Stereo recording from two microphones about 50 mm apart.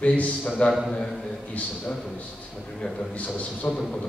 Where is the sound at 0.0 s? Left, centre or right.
Left.